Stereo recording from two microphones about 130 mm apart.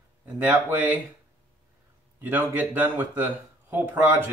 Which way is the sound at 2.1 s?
15° right (ahead or behind).